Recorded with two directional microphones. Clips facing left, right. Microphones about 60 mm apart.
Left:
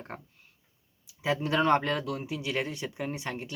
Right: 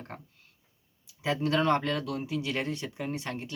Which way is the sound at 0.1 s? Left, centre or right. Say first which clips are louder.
Left 2 dB; centre.